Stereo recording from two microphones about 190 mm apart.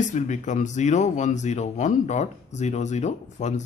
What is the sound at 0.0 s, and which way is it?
Speech, 40° left (ahead or behind).